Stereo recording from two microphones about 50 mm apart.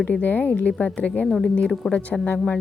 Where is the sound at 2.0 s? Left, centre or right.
Left.